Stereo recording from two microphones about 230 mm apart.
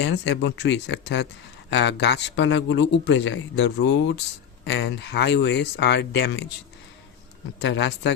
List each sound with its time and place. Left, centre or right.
0.0 s a man's voice: left
7.6 s a man's voice: left